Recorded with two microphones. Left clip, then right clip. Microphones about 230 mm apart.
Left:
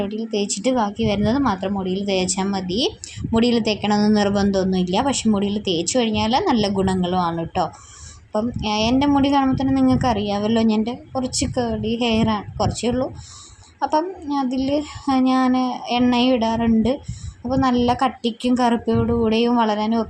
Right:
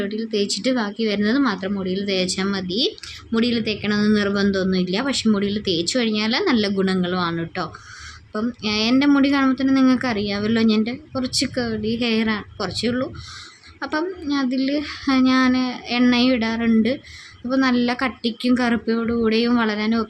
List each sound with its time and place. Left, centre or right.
0.3 s a woman's voice: centre